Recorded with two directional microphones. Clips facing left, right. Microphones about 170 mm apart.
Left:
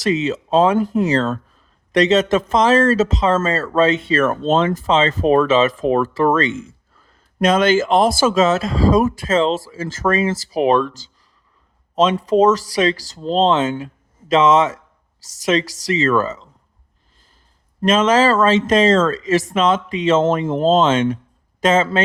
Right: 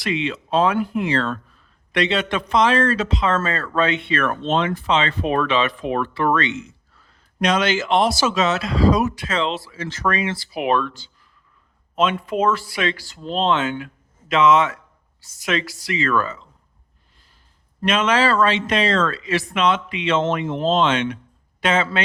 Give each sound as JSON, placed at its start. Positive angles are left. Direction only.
{"t": 0.0, "sound": "a man's voice", "side_deg": 40}
{"t": 17.8, "sound": "speech", "side_deg": 40}